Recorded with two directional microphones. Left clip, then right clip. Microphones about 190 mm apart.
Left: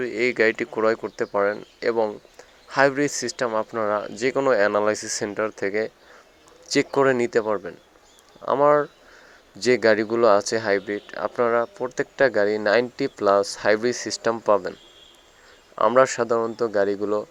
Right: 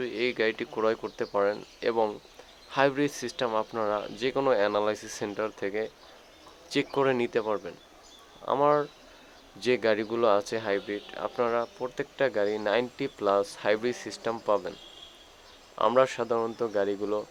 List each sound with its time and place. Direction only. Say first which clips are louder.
0.0 s speech: left 7 dB; 25° left (ahead or behind)
15.9 s speech: left 6 dB; 25° left (ahead or behind)